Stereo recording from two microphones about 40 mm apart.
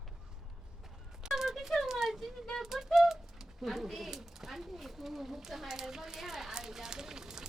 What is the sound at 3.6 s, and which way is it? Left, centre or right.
Speech, centre.